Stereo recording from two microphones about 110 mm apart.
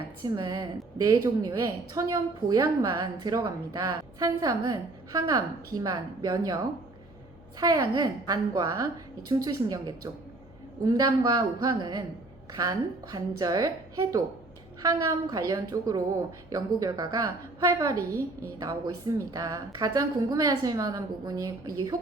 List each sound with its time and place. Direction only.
0.3 s a woman's voice: 35° right (ahead or behind)
7.6 s a woman's voice: 35° right (ahead or behind)